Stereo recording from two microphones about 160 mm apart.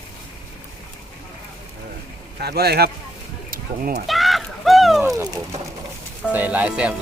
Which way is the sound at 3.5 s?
65° right (ahead or behind).